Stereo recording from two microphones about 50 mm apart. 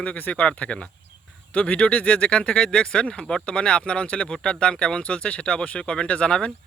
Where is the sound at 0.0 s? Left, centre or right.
Left.